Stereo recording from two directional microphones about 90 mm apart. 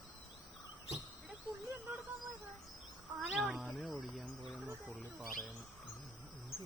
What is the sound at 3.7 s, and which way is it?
Cricket, centre (ahead or behind).